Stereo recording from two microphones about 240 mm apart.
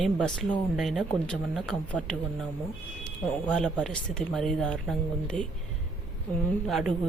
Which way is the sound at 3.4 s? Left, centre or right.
Centre.